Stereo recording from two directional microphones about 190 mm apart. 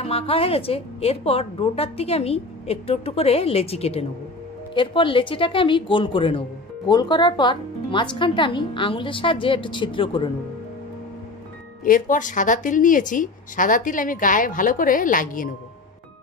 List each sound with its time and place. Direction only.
0.0 s a woman's voice: 30° left (ahead or behind)
11.8 s a woman's voice: 45° left (ahead or behind)